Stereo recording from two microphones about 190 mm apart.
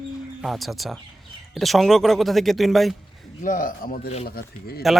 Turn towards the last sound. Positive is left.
turn(degrees=55)  # may be behind; listen again after turning